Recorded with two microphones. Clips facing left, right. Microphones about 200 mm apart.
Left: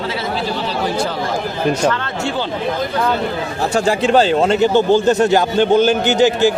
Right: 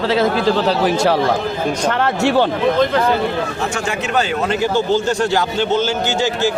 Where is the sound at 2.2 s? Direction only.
80° right.